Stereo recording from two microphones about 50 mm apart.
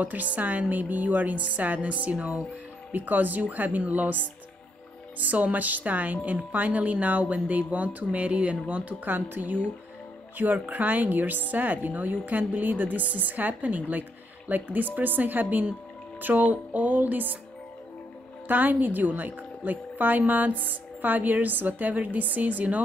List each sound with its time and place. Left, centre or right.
0.0 s speech: right
9.1 s speech: right
18.5 s speech: right